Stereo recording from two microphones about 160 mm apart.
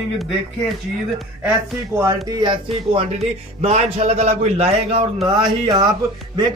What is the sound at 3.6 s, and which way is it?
A man's voice, 45° right (ahead or behind).